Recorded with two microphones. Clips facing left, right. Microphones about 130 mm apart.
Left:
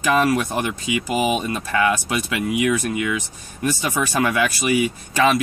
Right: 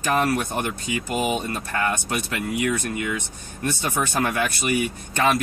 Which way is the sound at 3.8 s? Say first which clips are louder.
Left 2 dB; 85° left.